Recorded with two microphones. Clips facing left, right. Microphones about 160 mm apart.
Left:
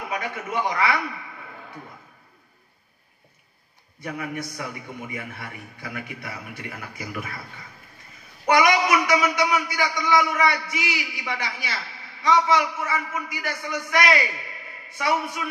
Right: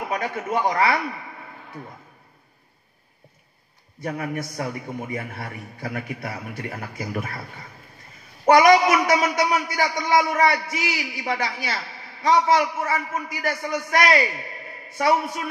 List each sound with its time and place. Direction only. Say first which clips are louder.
0.1 s a man's voice: right 3 dB; 40° right (ahead or behind)
4.0 s a man's voice: right 3 dB; 40° right (ahead or behind)